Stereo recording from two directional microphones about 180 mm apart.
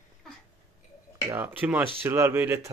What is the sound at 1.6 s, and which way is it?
Speech, 10° right (ahead or behind).